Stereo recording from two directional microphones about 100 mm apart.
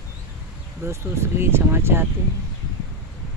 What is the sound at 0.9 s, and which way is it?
Speech, 25° right (ahead or behind).